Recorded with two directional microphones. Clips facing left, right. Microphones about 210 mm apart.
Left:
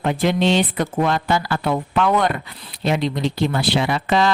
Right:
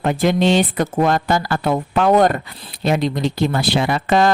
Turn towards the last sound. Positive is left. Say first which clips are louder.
# right 3 dB
turn(degrees=-45)  # may be behind; listen again after turning